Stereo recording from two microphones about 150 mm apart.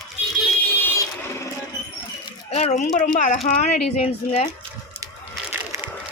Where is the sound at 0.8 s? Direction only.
15° left (ahead or behind).